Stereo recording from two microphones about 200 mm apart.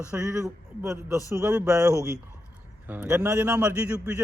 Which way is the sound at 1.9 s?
15° left (ahead or behind).